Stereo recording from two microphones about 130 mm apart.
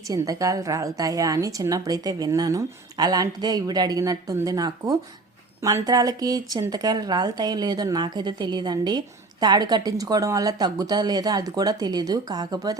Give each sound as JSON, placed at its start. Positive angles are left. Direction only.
{"t": 0.1, "sound": "a woman's voice", "side_deg": -25}